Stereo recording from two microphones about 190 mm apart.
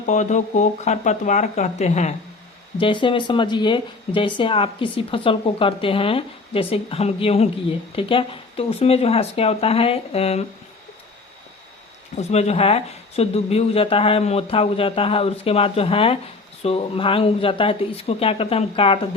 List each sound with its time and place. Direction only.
0.1 s speech: 40° left (ahead or behind)
2.7 s speech: 25° left (ahead or behind)
12.1 s speech: 35° left (ahead or behind)